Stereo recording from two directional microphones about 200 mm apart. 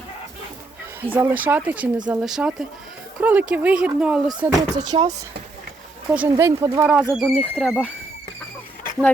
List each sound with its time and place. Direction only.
1.0 s speech: 10° right (ahead or behind)
4.9 s speech: 25° right (ahead or behind)
6.1 s speech: 10° right (ahead or behind)